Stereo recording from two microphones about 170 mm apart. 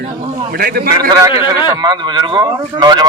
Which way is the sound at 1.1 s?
20° right (ahead or behind).